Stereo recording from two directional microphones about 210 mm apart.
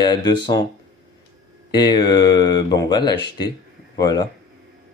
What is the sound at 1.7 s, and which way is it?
Speech, 20° left (ahead or behind).